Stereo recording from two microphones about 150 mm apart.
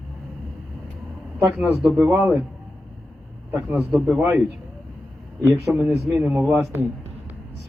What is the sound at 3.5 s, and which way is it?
Speech, 10° right (ahead or behind).